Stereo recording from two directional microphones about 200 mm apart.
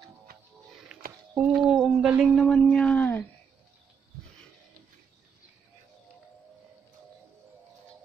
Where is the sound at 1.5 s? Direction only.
Centre (ahead or behind).